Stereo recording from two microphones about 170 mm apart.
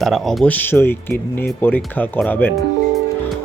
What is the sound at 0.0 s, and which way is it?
Speech, centre (ahead or behind).